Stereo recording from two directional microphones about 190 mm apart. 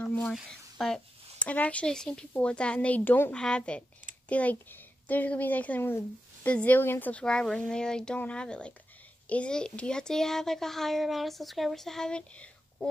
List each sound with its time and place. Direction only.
0.0 s a woman's voice: 5° left (ahead or behind)